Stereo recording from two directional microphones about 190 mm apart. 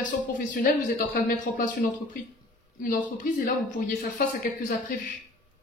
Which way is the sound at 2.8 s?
45° left (ahead or behind).